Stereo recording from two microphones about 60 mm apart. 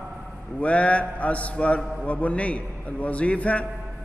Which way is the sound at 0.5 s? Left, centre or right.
Left.